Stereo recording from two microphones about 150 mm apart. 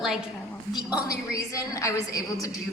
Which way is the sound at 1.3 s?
20° left (ahead or behind).